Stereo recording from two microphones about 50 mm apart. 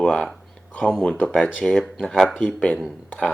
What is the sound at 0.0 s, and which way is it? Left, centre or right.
Speech, centre.